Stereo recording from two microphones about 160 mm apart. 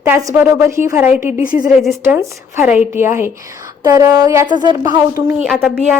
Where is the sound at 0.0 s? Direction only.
20° right (ahead or behind).